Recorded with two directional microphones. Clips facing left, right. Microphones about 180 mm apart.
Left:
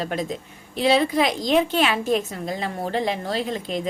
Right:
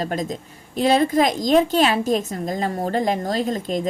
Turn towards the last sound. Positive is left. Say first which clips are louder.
# right 3 dB
turn(degrees=-45)  # may be behind; listen again after turning